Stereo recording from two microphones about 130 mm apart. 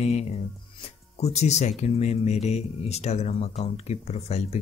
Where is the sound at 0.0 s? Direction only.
55° left (ahead or behind).